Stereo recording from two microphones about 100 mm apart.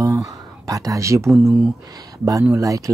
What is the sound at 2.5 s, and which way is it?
Speech, 35° right (ahead or behind).